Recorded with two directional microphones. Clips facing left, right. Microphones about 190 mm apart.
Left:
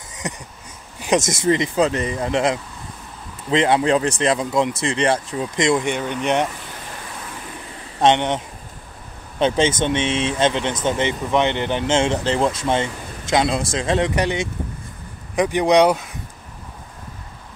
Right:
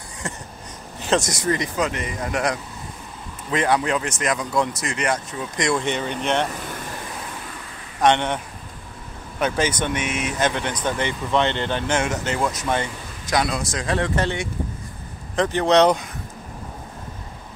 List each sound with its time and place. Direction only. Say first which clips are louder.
0.2 s speech: left 2 dB; 20° left (ahead or behind)
8.0 s speech: left 2 dB; 20° left (ahead or behind)
9.4 s speech: left 4 dB; 25° left (ahead or behind); by 16.1 s 10° left (ahead or behind)